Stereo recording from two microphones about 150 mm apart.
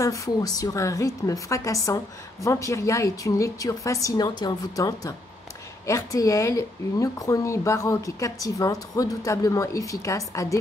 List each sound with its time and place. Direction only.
0.0 s speech: 20° left (ahead or behind)